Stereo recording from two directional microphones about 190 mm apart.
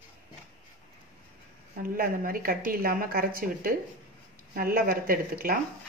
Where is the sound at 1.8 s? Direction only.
50° right (ahead or behind).